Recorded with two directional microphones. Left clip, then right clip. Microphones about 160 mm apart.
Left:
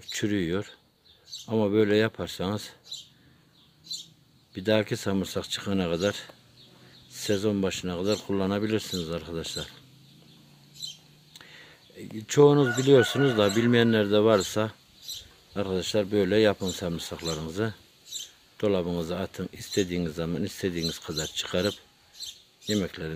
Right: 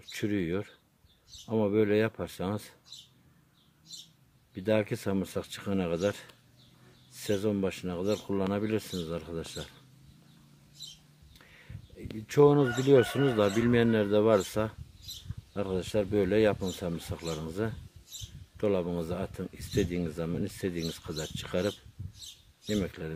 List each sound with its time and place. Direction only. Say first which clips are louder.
0.0 s speech: left 4 dB; centre (ahead or behind)
4.6 s speech: left 3 dB; 5° left (ahead or behind)
11.3 s speech: left 7 dB; 5° left (ahead or behind)